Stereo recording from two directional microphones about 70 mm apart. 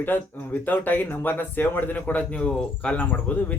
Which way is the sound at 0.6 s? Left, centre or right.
Left.